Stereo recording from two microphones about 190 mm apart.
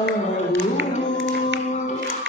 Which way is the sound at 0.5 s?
80° right.